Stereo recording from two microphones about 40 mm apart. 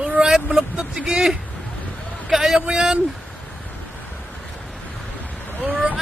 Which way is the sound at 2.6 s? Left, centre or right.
Centre.